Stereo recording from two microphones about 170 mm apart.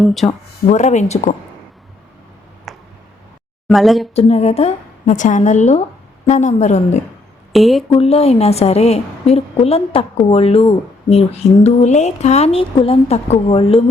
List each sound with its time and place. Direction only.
0.0 s speech: centre (ahead or behind)
0.7 s a woman's voice: 45° left (ahead or behind)
2.7 s a sound: centre (ahead or behind)
3.7 s speech: centre (ahead or behind)
4.1 s a woman's voice: 40° left (ahead or behind)
7.5 s speech: centre (ahead or behind)
7.9 s speech: 35° left (ahead or behind)